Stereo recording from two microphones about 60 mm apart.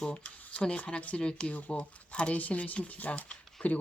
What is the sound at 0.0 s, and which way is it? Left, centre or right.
Speech, left.